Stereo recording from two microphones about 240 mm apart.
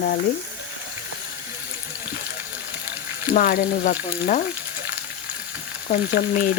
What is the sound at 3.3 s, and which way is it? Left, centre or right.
Frying, left.